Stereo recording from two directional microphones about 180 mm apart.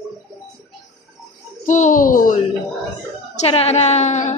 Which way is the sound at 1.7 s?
45° left (ahead or behind).